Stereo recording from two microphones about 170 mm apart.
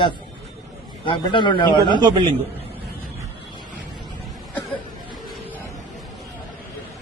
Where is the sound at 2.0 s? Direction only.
30° right (ahead or behind).